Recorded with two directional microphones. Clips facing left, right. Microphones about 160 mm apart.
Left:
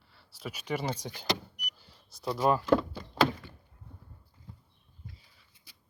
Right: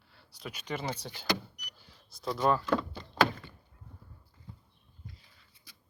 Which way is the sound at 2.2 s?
5° left (ahead or behind).